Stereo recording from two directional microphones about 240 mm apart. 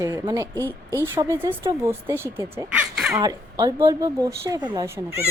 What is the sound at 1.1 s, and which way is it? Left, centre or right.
Speech, centre.